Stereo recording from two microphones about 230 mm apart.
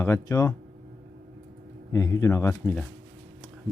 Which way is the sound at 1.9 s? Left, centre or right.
Centre.